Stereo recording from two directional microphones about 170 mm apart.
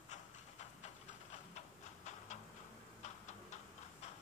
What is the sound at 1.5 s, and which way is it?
Tick-tock, 45° left (ahead or behind).